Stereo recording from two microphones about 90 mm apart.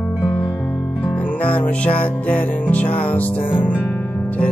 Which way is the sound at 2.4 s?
15° left (ahead or behind).